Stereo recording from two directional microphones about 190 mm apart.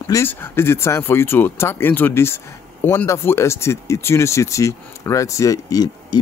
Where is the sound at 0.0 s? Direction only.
15° left (ahead or behind).